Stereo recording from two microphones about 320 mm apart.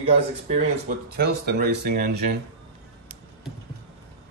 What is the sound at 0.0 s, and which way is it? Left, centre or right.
Speech, right.